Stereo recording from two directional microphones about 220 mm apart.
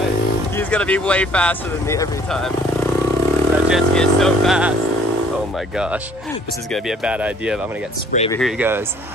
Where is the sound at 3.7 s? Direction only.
Centre (ahead or behind).